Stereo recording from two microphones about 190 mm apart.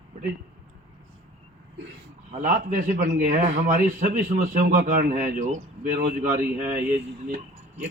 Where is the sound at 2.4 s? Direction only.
45° right (ahead or behind).